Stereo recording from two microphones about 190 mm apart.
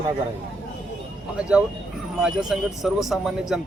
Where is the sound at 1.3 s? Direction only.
5° right (ahead or behind).